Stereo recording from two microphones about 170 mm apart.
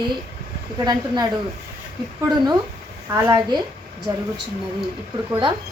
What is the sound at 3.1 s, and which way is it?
Speech, 15° right (ahead or behind).